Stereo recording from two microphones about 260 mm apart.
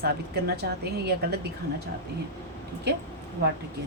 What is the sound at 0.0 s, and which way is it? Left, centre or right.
Speech, right.